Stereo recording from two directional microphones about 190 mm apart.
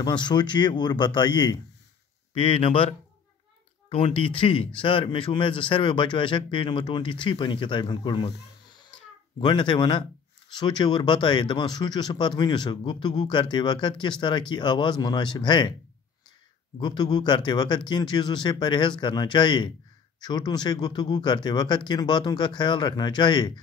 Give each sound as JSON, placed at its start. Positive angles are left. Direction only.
{"t": 0.0, "sound": "speech", "side_deg": 25}
{"t": 3.9, "sound": "speech", "side_deg": 30}
{"t": 9.4, "sound": "speech", "side_deg": 25}
{"t": 16.7, "sound": "speech", "side_deg": 25}